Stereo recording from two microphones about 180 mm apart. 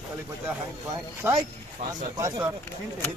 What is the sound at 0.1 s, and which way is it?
Speech, 15° right (ahead or behind).